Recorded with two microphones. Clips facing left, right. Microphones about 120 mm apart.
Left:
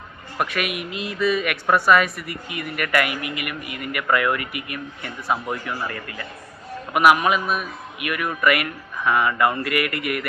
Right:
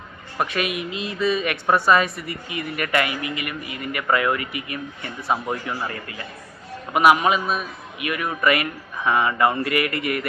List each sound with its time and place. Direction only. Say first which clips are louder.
0.3 s a woman's voice: right 1 dB; 25° right (ahead or behind)